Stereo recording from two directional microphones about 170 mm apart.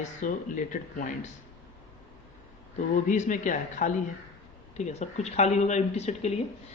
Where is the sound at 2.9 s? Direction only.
45° left (ahead or behind).